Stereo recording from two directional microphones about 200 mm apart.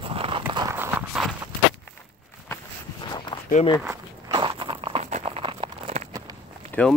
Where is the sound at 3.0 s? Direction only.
20° left (ahead or behind).